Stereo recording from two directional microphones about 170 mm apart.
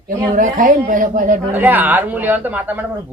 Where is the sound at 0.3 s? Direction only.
50° right (ahead or behind).